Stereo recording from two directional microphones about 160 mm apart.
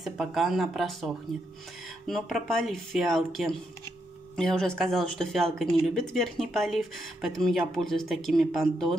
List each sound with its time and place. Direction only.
0.0 s speech: centre (ahead or behind)